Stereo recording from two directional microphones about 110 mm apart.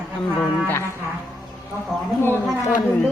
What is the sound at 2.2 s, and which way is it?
Speech, 20° left (ahead or behind).